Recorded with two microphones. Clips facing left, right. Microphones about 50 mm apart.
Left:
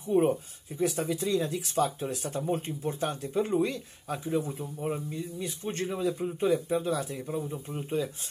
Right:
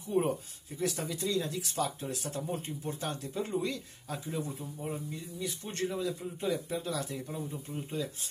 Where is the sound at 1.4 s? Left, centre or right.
Left.